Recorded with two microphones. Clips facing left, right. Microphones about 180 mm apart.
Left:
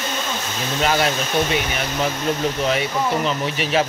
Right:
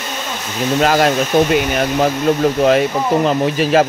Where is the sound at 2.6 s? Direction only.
50° right (ahead or behind).